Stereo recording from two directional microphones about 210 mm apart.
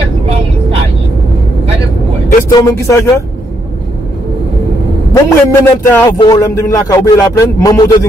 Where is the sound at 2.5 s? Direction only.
15° left (ahead or behind).